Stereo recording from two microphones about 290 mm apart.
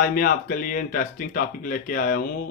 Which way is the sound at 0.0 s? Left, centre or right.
Left.